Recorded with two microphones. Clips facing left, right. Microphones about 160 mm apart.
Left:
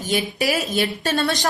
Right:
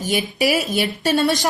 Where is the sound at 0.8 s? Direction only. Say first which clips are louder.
Right 3 dB; 15° right (ahead or behind).